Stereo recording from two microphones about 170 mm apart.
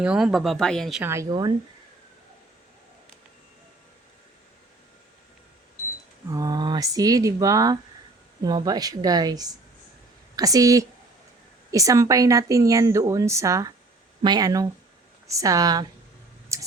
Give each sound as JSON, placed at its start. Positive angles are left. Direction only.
{"t": 0.0, "sound": "speech", "side_deg": -5}
{"t": 1.0, "sound": "a woman's voice", "side_deg": -15}
{"t": 6.3, "sound": "a woman's voice", "side_deg": -20}
{"t": 16.5, "sound": "a sound", "side_deg": -15}